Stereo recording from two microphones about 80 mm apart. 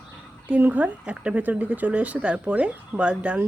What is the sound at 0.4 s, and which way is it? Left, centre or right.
A woman's voice, right.